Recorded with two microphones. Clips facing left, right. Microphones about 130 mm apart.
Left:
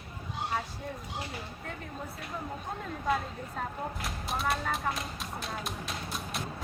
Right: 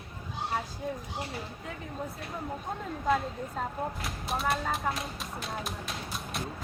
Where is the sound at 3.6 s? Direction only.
Centre (ahead or behind).